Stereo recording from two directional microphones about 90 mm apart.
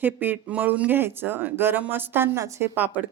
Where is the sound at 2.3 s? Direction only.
40° right (ahead or behind).